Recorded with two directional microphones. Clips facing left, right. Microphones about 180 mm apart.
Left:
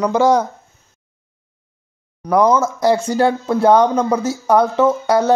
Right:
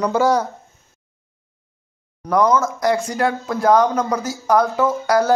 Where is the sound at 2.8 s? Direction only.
30° left (ahead or behind).